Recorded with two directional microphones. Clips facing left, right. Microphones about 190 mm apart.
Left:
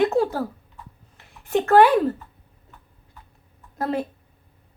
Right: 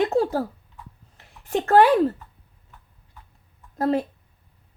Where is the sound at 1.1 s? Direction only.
35° right (ahead or behind).